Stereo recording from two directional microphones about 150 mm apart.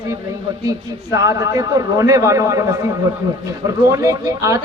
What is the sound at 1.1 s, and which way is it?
A man's voice, 20° right (ahead or behind).